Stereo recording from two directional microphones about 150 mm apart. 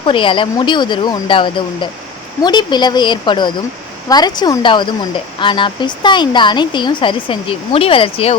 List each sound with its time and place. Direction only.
0.0 s a woman's voice: 35° left (ahead or behind)